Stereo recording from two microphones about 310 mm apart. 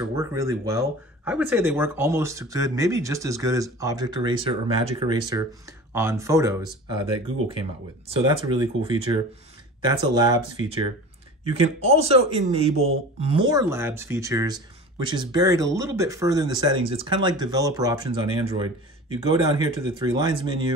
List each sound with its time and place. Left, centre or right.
0.0 s speech: centre
11.8 s speech: centre
19.4 s speech: centre